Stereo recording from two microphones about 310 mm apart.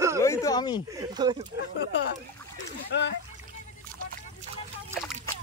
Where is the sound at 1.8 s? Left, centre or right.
Left.